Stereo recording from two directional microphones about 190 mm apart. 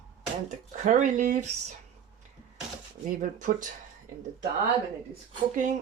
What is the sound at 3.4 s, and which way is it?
Speech, 45° right (ahead or behind).